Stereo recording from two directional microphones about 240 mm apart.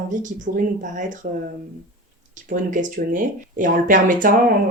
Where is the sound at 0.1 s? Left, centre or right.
Right.